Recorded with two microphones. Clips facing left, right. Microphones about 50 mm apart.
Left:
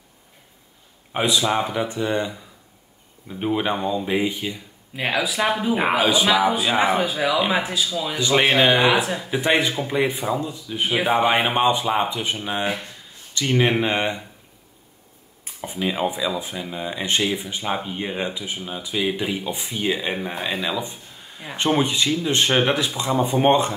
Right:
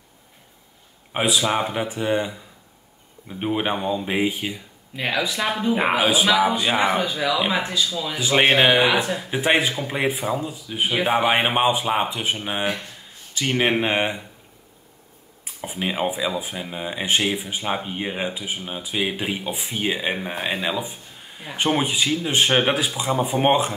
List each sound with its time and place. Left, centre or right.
1.1 s speech: centre
3.3 s speech: centre
4.9 s speech: centre
5.9 s speech: centre
7.0 s speech: centre
8.2 s speech: centre
8.7 s speech: centre
15.4 s speech: centre
20.8 s a sound: centre
21.5 s speech: centre